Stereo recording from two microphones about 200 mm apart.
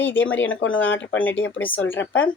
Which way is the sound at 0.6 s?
75° left (ahead or behind).